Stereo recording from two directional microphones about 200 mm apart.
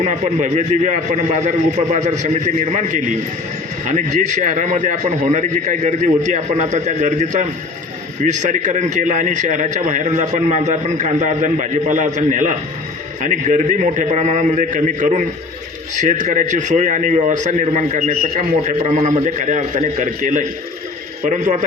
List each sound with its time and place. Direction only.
0.0 s a man's voice: 35° right (ahead or behind)